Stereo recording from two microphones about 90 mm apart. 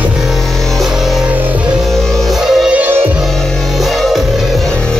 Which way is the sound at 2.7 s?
20° right (ahead or behind).